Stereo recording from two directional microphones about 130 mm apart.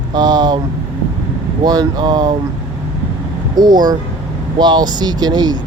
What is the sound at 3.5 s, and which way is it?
Speech, 30° right (ahead or behind).